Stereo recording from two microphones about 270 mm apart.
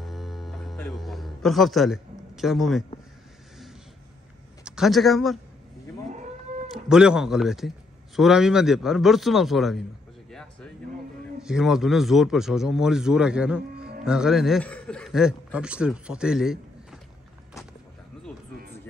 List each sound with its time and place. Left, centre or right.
0.0 s music: centre
4.6 s speech: centre
6.7 s a man's voice: centre
11.4 s a man's voice: centre
13.7 s music: right
14.0 s a man's voice: centre